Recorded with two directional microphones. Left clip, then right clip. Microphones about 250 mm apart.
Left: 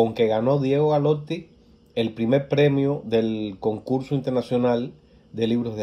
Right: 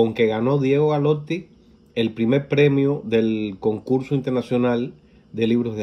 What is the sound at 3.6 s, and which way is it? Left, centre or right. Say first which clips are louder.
Speech: right 3 dB; centre.